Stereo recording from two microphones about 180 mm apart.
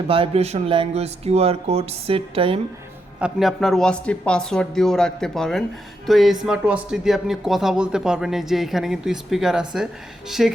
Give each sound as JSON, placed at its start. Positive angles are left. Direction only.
{"t": 0.1, "sound": "speech", "side_deg": -30}
{"t": 3.2, "sound": "speech", "side_deg": -5}